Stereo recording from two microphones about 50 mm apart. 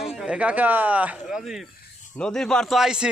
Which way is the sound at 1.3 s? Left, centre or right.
Centre.